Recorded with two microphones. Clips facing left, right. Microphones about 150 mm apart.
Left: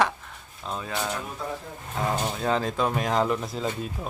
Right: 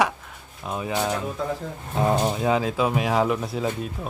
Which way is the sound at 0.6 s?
15° right (ahead or behind).